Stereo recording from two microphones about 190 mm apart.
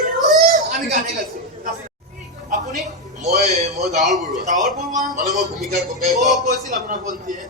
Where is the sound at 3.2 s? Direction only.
35° right (ahead or behind).